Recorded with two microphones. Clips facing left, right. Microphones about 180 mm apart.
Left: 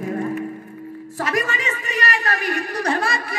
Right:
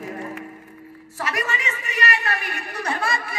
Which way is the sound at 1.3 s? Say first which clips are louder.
Left 4 dB; 30° left (ahead or behind).